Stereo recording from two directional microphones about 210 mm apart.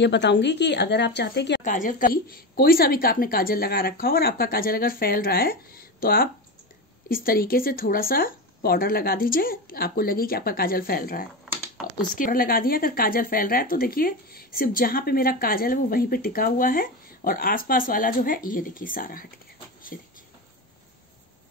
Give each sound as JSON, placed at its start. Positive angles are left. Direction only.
{"t": 0.0, "sound": "speech", "side_deg": 55}
{"t": 1.6, "sound": "speech", "side_deg": 40}